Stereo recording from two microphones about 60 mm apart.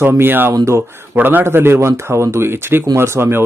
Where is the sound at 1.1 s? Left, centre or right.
Right.